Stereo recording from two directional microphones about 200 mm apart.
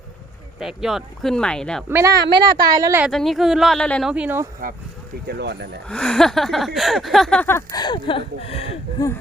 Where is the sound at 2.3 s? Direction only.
20° right (ahead or behind).